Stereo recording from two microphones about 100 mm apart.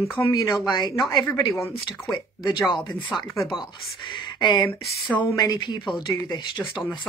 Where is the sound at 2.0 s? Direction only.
45° left (ahead or behind).